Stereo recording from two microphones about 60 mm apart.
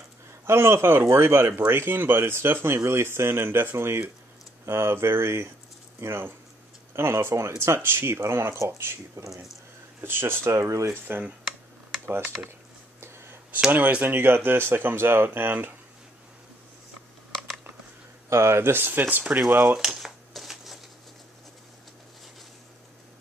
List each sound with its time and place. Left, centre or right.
0.5 s speech: right
10.0 s speech: right
10.5 s speech: right
10.9 s speech: right
13.0 s a sound: right
13.7 s speech: right
17.3 s a sound: centre
18.3 s speech: right
19.8 s a sound: centre